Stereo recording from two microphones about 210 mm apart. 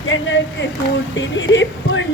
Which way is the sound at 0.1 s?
60° left (ahead or behind).